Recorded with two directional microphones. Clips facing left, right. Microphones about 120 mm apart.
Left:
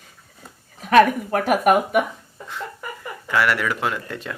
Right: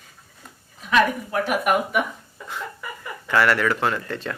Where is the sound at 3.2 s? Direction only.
10° left (ahead or behind).